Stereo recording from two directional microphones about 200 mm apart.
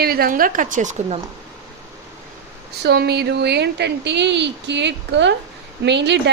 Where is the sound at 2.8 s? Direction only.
55° right (ahead or behind).